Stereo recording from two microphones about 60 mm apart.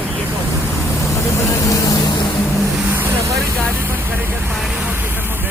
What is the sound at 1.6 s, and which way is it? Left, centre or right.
Vehicle, left.